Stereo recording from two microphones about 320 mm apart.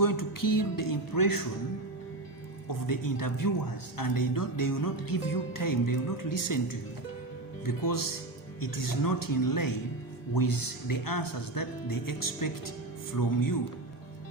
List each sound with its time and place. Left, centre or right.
0.0 s music: left
2.8 s music: left
7.6 s speech: left